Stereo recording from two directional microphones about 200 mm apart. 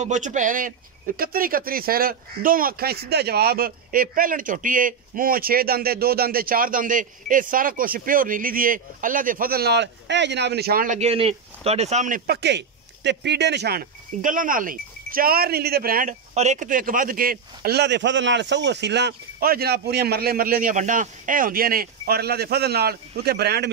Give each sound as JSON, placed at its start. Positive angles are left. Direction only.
{"t": 0.0, "sound": "speech", "side_deg": -35}
{"t": 11.0, "sound": "speech", "side_deg": -30}